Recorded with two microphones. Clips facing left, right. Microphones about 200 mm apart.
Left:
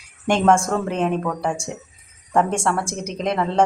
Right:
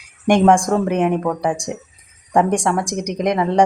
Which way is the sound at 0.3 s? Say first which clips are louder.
Right 4 dB; 15° right (ahead or behind).